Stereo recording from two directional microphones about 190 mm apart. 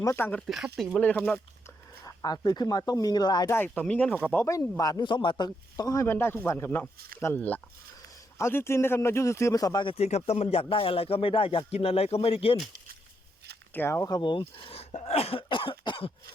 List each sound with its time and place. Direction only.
0.0 s speech: 15° left (ahead or behind)
2.0 s a man's voice: 20° left (ahead or behind)
13.7 s a man's voice: 15° left (ahead or behind)